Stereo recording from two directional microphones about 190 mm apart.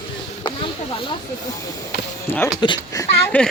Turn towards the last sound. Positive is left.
turn(degrees=10)  # may be behind; listen again after turning